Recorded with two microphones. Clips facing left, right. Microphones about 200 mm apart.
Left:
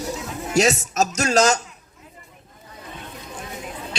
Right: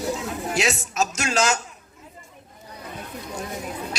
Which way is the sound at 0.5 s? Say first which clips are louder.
Left 6 dB; 40° left (ahead or behind).